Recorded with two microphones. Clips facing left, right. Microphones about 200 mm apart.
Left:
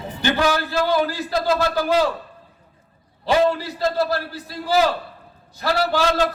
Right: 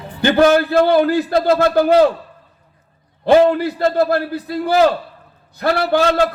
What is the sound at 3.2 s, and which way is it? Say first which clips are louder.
A man's voice: right 7 dB; 55° right (ahead or behind).